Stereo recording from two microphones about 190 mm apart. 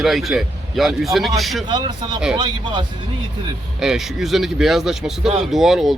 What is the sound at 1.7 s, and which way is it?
Speech, 25° right (ahead or behind).